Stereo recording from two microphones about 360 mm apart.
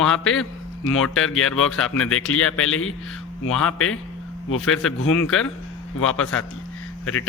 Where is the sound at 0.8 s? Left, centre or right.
Left.